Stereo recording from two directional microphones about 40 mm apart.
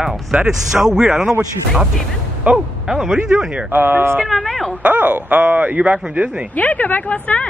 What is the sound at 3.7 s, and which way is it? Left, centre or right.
Speech, right.